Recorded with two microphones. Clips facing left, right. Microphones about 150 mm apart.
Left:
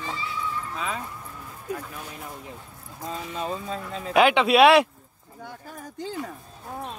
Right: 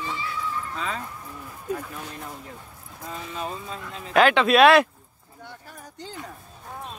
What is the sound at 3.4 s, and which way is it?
Speech, 35° left (ahead or behind).